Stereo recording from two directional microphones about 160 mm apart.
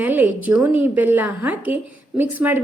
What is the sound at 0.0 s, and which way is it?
A woman's voice, 10° right (ahead or behind).